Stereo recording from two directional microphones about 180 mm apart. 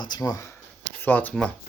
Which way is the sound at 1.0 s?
10° left (ahead or behind).